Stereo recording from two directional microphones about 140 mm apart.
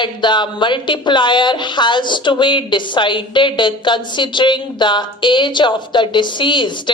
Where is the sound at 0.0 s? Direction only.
35° left (ahead or behind).